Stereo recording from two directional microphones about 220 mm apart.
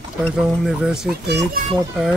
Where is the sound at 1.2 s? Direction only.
50° right (ahead or behind).